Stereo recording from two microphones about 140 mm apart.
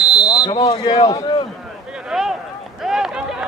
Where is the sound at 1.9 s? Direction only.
5° right (ahead or behind).